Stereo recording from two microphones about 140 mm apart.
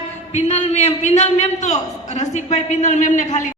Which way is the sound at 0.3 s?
50° left (ahead or behind).